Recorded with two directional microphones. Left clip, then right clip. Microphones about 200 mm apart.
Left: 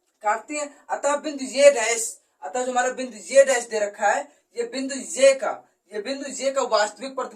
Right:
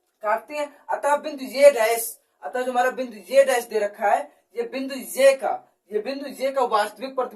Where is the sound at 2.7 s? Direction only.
15° right (ahead or behind).